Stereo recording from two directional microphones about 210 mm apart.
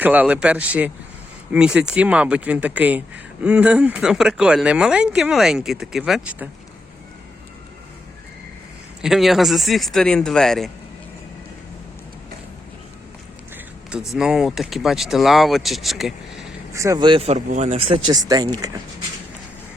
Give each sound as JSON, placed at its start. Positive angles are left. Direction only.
{"t": 0.0, "sound": "speech", "side_deg": -5}
{"t": 9.0, "sound": "speech", "side_deg": 0}
{"t": 13.9, "sound": "speech", "side_deg": 0}
{"t": 16.7, "sound": "speech", "side_deg": -15}